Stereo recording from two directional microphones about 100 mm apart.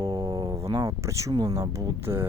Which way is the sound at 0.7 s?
35° right (ahead or behind).